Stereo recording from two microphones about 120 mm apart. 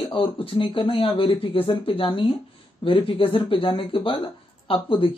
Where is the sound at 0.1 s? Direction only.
45° left (ahead or behind).